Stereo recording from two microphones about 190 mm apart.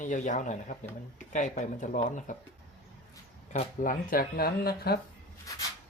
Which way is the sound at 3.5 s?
45° left (ahead or behind).